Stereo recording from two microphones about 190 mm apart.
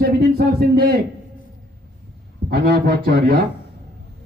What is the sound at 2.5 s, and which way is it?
Speech, 55° right (ahead or behind).